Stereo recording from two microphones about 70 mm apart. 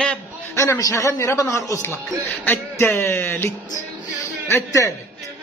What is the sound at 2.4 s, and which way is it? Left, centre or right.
Music, left.